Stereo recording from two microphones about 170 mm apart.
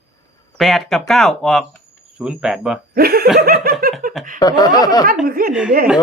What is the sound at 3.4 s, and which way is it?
Giggle, 60° right (ahead or behind).